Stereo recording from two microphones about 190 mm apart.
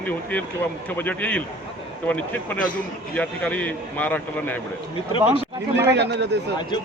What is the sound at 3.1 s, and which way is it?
A man's voice, 5° left (ahead or behind).